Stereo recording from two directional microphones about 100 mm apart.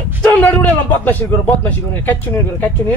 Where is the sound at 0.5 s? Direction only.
15° left (ahead or behind).